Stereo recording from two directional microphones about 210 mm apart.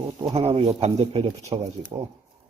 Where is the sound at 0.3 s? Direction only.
30° right (ahead or behind).